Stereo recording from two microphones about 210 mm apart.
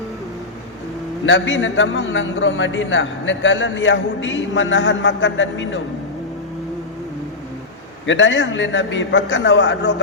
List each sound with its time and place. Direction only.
1.2 s a man's voice: 60° left (ahead or behind)
8.0 s a man's voice: 60° left (ahead or behind)